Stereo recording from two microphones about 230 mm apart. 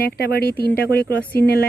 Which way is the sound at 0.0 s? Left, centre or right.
Left.